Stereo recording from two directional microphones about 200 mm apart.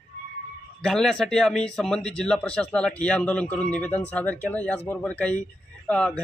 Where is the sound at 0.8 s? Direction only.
Centre (ahead or behind).